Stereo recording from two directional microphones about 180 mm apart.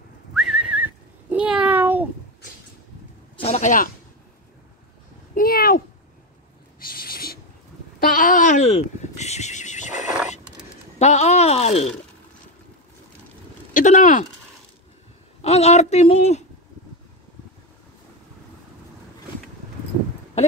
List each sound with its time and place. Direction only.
0.3 s whistling: 5° right (ahead or behind)
3.3 s speech: 35° left (ahead or behind)
5.3 s a sound: 55° left (ahead or behind)
6.8 s owl: 55° left (ahead or behind)
8.0 s horse: 50° left (ahead or behind)
10.0 s a sound: 5° right (ahead or behind)
11.0 s a sound: 40° left (ahead or behind)
13.7 s speech: 45° left (ahead or behind)
15.4 s a woman's voice: 35° left (ahead or behind)